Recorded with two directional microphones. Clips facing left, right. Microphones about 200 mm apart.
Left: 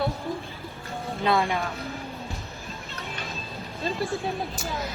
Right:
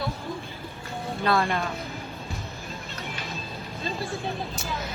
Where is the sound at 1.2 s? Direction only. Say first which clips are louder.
Left 1 dB; 15° left (ahead or behind).